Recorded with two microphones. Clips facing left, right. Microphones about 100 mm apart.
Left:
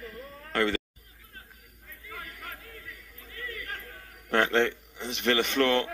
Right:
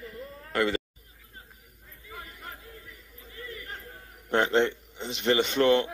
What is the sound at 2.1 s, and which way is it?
Chatter, 20° right (ahead or behind).